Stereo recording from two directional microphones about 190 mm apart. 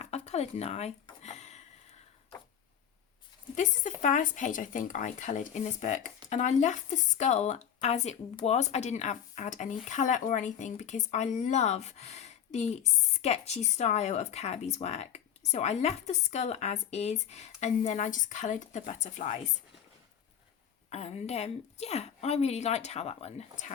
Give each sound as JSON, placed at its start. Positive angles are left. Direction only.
{"t": 0.0, "sound": "a sound", "side_deg": 35}
{"t": 3.5, "sound": "speech", "side_deg": 40}
{"t": 20.9, "sound": "speech", "side_deg": 35}